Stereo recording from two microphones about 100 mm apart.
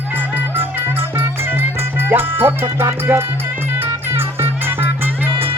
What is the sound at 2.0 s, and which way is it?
Music, 20° right (ahead or behind).